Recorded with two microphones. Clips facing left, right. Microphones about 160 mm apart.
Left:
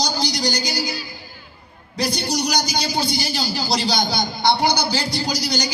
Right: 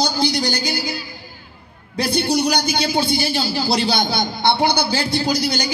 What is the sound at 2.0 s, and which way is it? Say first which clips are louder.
A man's voice: right 4 dB; 55° right (ahead or behind).